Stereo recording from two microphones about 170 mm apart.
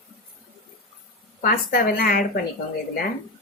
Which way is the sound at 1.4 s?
60° left (ahead or behind).